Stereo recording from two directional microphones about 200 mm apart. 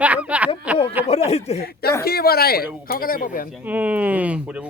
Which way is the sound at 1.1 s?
30° left (ahead or behind).